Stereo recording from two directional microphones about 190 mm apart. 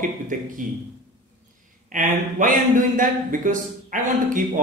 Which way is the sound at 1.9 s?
45° right (ahead or behind).